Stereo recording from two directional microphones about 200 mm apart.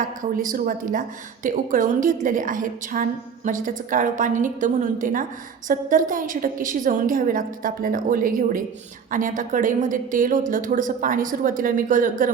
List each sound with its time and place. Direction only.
0.0 s a woman's voice: 40° right (ahead or behind)